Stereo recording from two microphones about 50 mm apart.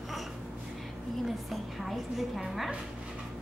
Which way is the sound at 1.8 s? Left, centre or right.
Centre.